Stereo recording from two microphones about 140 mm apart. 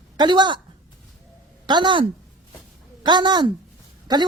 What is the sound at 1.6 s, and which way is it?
Speech, 35° right (ahead or behind).